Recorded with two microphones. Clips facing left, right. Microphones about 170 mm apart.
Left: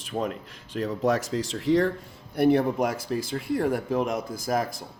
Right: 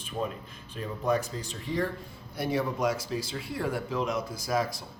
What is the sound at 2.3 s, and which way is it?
A man's voice, 60° left (ahead or behind).